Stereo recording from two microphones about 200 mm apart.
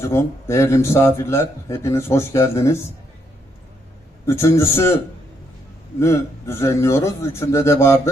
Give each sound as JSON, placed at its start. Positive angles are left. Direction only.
{"t": 0.0, "sound": "a man's voice", "side_deg": 15}
{"t": 4.3, "sound": "a man's voice", "side_deg": 15}
{"t": 6.0, "sound": "a man's voice", "side_deg": 15}